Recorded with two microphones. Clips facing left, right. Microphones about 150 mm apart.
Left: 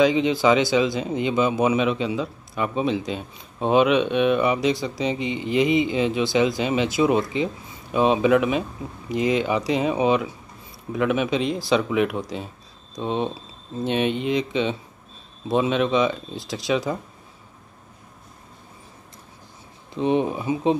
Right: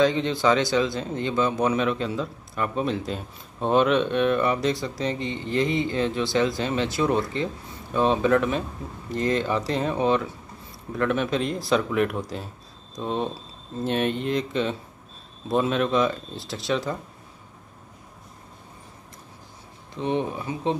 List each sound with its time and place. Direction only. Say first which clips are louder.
0.0 s a man's voice: left 3 dB; 10° left (ahead or behind)
20.0 s a man's voice: left 5 dB; 15° left (ahead or behind)